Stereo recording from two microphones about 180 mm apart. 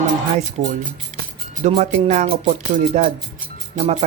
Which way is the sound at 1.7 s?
35° right (ahead or behind).